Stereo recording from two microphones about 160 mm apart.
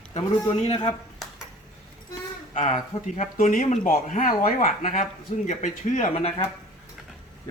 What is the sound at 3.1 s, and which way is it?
Speech, 60° left (ahead or behind).